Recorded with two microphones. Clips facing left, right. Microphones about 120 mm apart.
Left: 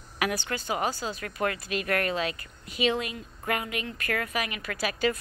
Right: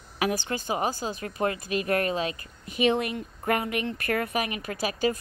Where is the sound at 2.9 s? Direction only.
50° right (ahead or behind).